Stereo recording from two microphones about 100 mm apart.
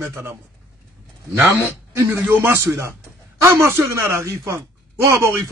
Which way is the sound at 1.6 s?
25° right (ahead or behind).